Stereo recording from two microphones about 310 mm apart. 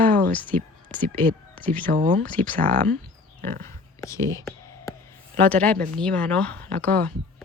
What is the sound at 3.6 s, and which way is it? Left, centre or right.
Speech, centre.